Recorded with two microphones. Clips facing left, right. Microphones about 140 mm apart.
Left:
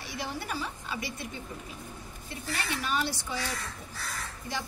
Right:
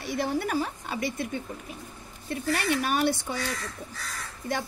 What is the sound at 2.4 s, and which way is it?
Speech, 55° right (ahead or behind).